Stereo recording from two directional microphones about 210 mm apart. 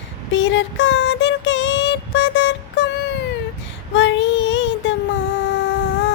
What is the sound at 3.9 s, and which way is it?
Child singing, 60° left (ahead or behind).